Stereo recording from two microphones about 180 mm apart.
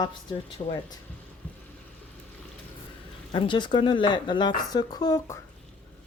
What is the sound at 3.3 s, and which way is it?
Speech, 25° left (ahead or behind).